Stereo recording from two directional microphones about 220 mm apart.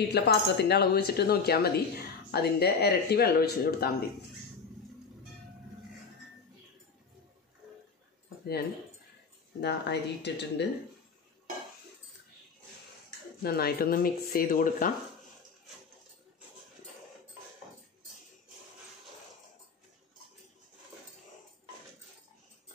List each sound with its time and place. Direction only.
0.1 s a woman's voice: 45° left (ahead or behind)
9.6 s a woman's voice: 50° left (ahead or behind)
13.4 s speech: 45° left (ahead or behind)